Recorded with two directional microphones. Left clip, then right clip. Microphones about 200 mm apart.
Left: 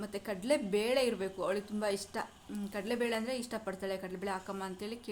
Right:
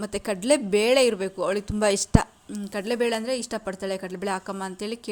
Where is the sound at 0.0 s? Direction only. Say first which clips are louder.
Right 11 dB; 35° right (ahead or behind).